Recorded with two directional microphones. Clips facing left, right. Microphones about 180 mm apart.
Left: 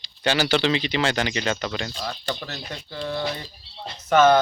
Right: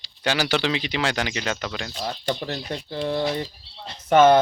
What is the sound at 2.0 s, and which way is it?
Speech, 25° right (ahead or behind).